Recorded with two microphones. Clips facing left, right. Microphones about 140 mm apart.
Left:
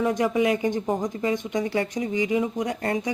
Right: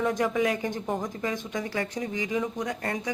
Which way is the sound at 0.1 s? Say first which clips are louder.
Left 4 dB; 15° left (ahead or behind).